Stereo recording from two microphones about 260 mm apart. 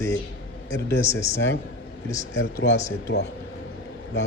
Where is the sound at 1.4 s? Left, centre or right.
Left.